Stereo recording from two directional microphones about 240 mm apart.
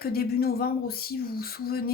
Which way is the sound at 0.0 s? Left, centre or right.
Left.